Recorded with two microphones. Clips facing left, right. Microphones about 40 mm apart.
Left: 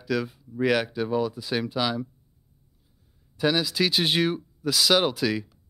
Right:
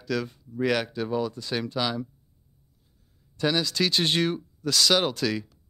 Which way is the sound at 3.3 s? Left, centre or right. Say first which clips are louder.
Left 1 dB; centre.